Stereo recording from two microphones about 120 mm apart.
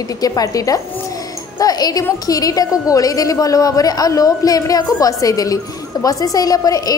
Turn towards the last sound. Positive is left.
turn(degrees=30)  # may be behind; listen again after turning